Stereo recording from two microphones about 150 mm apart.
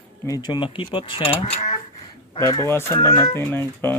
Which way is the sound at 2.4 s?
20° left (ahead or behind).